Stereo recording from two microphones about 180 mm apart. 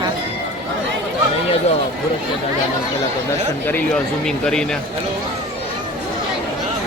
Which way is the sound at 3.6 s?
10° left (ahead or behind).